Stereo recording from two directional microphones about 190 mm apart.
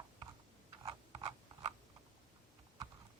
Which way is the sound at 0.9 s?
25° right (ahead or behind).